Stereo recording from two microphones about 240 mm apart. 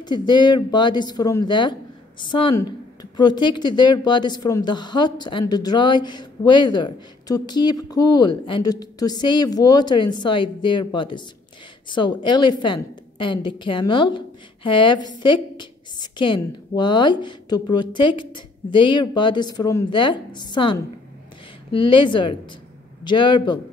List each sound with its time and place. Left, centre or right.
0.0 s a woman's voice: centre